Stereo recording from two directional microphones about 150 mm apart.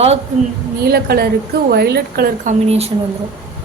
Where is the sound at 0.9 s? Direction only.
90° right; by 2.9 s 45° right (ahead or behind).